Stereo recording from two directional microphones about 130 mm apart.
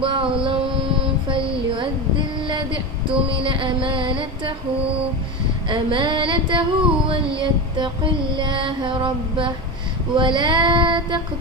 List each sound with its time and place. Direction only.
0.0 s music: 40° right (ahead or behind)
1.0 s a sound: 40° right (ahead or behind)
3.1 s music: 40° right (ahead or behind)
5.6 s music: 40° right (ahead or behind)